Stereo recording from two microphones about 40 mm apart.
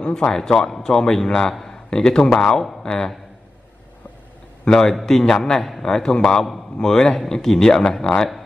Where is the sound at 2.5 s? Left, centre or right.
Centre.